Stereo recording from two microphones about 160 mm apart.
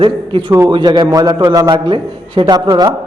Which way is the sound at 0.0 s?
30° right (ahead or behind).